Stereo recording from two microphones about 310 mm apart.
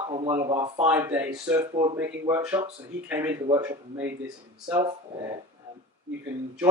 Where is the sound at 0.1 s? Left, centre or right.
Centre.